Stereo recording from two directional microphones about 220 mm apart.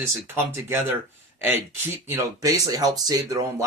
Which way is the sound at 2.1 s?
15° right (ahead or behind).